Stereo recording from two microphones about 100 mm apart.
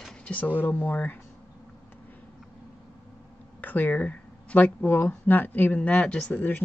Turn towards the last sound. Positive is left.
turn(degrees=15)  # may be behind; listen again after turning